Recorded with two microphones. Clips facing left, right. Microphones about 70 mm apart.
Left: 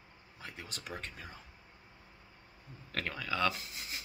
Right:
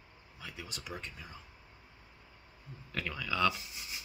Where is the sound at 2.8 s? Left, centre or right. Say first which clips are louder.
Even; left.